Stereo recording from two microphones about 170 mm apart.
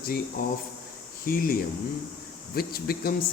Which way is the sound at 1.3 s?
55° left (ahead or behind).